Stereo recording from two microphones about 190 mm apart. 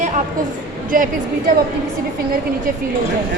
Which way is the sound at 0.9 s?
45° right (ahead or behind).